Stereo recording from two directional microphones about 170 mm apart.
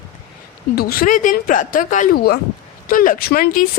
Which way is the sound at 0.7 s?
55° left (ahead or behind).